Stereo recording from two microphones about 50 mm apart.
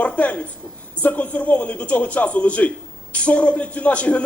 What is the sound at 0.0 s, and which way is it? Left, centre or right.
A man's voice, left.